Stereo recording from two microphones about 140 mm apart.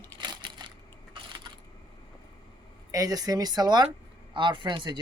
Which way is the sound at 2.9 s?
25° right (ahead or behind).